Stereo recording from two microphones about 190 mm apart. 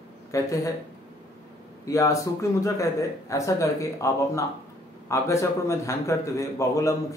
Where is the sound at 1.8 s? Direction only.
15° left (ahead or behind).